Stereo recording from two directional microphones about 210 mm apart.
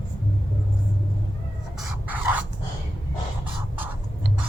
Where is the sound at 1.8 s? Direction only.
5° right (ahead or behind).